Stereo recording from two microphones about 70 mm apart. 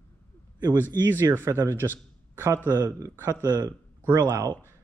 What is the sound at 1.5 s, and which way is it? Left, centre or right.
A man's voice, right.